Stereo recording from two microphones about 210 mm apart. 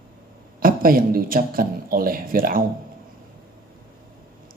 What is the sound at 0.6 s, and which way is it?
A man's voice, 45° right (ahead or behind).